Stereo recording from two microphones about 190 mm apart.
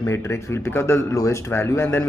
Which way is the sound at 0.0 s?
15° left (ahead or behind).